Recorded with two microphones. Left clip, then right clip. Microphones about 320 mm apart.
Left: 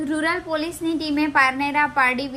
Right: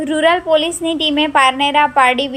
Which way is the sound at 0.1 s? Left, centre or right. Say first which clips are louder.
Right 12 dB; right.